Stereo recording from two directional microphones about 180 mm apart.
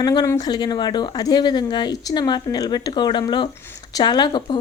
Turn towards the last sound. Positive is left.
turn(degrees=25)  # may be behind; listen again after turning